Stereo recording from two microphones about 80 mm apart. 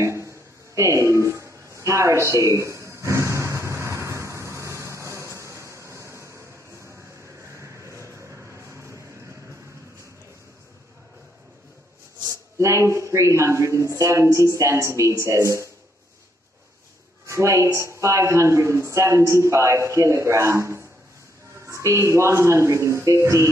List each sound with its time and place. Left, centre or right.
0.0 s a sound: right
7.5 s vehicle: right
12.3 s speech: right
17.3 s speech: right